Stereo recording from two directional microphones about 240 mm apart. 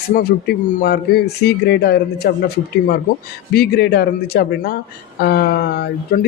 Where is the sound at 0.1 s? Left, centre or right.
Left.